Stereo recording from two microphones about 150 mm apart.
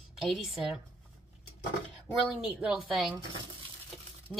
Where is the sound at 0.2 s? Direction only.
Centre (ahead or behind).